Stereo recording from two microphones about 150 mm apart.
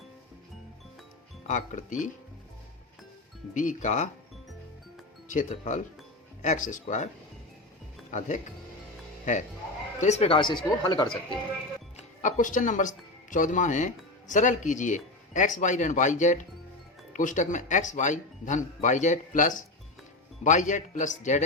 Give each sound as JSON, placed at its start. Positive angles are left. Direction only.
{"t": 1.5, "sound": "speech", "side_deg": 55}
{"t": 3.5, "sound": "speech", "side_deg": 60}
{"t": 5.3, "sound": "speech", "side_deg": 55}
{"t": 8.1, "sound": "speech", "side_deg": 55}
{"t": 9.3, "sound": "speech", "side_deg": 60}
{"t": 10.0, "sound": "speech", "side_deg": 45}
{"t": 11.9, "sound": "speech", "side_deg": 55}